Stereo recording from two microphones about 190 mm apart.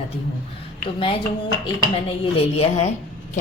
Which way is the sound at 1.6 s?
30° left (ahead or behind).